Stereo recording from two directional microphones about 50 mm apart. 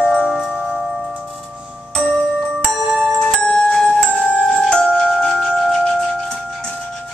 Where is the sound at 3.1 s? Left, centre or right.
Centre.